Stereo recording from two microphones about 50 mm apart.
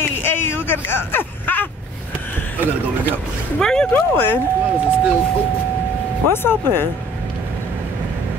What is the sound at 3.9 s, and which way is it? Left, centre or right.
Speech, left.